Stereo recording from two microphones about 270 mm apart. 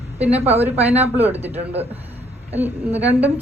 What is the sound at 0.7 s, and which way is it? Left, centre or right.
Speech, centre.